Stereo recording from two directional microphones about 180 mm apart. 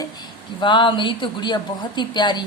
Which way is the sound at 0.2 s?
25° left (ahead or behind).